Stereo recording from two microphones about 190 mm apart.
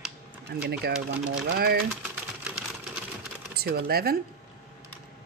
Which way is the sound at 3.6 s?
55° right (ahead or behind).